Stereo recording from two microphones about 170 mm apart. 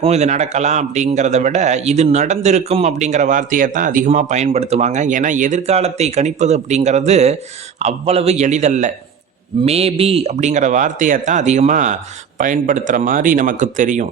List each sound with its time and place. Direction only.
0.0 s a man's voice: 40° right (ahead or behind)